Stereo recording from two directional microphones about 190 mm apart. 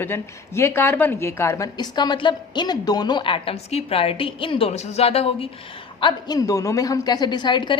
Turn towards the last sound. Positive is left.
turn(degrees=25)  # may be behind; listen again after turning